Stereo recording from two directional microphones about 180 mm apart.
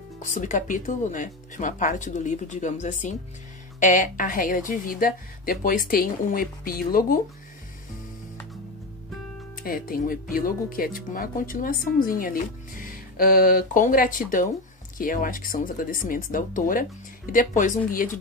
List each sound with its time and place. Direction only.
0.2 s a woman's voice: 45° left (ahead or behind)
9.6 s a woman's voice: 50° left (ahead or behind)
13.2 s a woman's voice: 55° left (ahead or behind)